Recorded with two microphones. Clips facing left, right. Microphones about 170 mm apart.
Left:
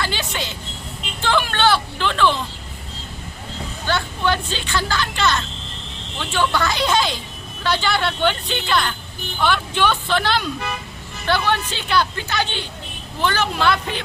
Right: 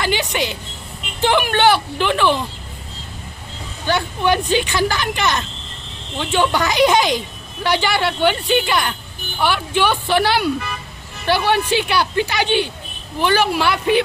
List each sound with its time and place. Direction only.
0.0 s a sound: 15° right (ahead or behind)
1.2 s speech: 15° right (ahead or behind)
3.8 s speech: 15° right (ahead or behind)